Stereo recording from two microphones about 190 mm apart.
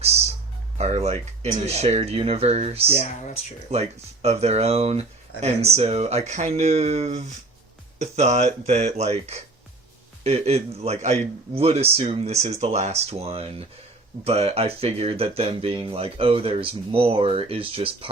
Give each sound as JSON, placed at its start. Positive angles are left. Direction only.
{"t": 0.0, "sound": "music", "side_deg": -35}
{"t": 0.8, "sound": "a man's voice", "side_deg": -35}
{"t": 2.9, "sound": "speech", "side_deg": 35}
{"t": 3.7, "sound": "a man's voice", "side_deg": -35}